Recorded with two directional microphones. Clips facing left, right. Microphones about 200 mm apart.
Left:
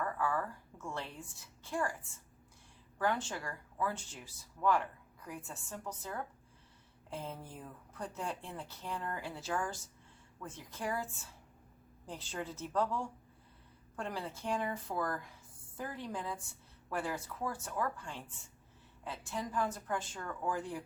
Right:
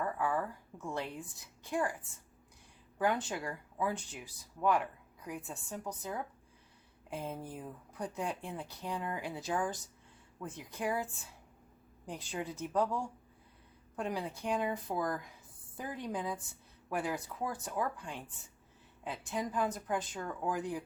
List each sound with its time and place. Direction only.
0.0 s speech: 15° right (ahead or behind)
3.0 s speech: 15° right (ahead or behind)